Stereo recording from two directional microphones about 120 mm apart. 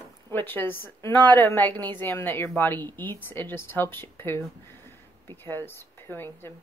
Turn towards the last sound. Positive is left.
turn(degrees=20)  # may be behind; listen again after turning